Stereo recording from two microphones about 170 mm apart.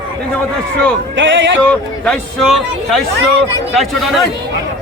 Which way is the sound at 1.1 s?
90° right.